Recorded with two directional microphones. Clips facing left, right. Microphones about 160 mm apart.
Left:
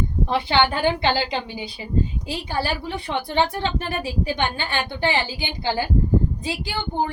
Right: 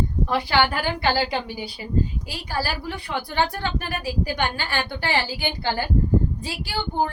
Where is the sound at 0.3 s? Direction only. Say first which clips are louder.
Left 2 dB; 20° left (ahead or behind).